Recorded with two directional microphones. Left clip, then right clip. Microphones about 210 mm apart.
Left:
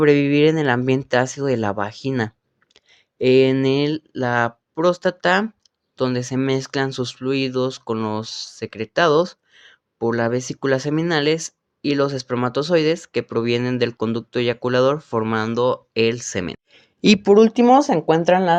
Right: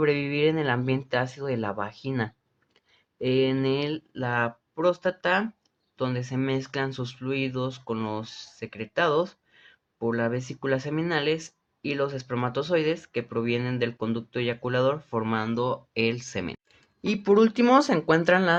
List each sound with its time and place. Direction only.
0.0 s speech: 30° left (ahead or behind)
17.2 s speech: 25° left (ahead or behind)